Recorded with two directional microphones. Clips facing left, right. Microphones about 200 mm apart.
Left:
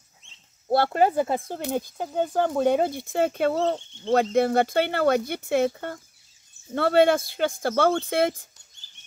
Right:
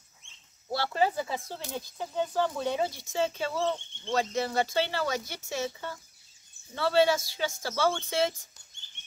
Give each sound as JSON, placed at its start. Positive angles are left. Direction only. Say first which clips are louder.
{"t": 0.7, "sound": "speech", "louder": "left 7 dB", "side_deg": 55}
{"t": 3.6, "sound": "speech", "louder": "left 5 dB", "side_deg": 40}
{"t": 4.1, "sound": "speech", "louder": "left 9 dB", "side_deg": 60}